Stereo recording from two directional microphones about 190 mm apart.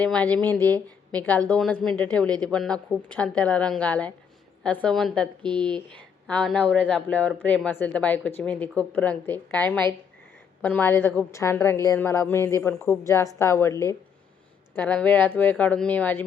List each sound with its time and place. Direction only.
0.0 s a woman's voice: 5° left (ahead or behind)
5.4 s speech: 25° right (ahead or behind)
5.7 s a woman's voice: 5° left (ahead or behind)